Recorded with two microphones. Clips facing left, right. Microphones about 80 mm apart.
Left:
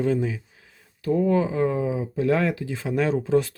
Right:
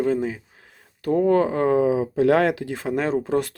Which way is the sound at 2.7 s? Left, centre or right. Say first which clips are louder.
Even; right.